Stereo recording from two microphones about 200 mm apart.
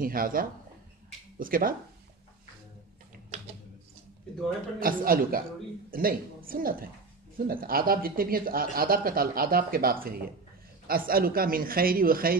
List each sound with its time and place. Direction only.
0.0 s a man's voice: 45° right (ahead or behind)
4.7 s a man's voice: 45° right (ahead or behind)